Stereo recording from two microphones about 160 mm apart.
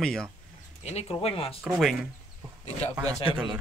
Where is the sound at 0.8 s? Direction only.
40° left (ahead or behind).